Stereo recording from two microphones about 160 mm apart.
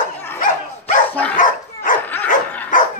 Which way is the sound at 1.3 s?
55° left (ahead or behind).